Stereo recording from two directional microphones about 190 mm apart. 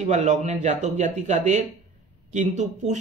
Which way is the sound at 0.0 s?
40° right (ahead or behind).